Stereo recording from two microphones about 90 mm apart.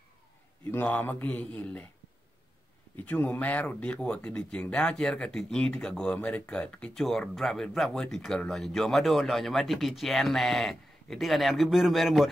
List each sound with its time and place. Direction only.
0.7 s speech: 20° left (ahead or behind)
3.0 s speech: 15° left (ahead or behind); by 12.3 s centre (ahead or behind)